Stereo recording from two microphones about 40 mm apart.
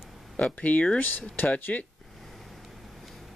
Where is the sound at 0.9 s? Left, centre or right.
Left.